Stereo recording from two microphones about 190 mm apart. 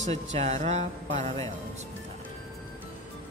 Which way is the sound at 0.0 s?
35° right (ahead or behind).